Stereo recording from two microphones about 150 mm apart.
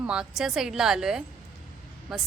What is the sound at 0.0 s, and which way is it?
A woman's voice, 5° right (ahead or behind).